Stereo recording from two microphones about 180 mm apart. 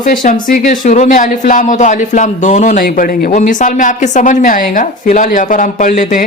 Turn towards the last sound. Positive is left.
turn(degrees=45)  # may be behind; listen again after turning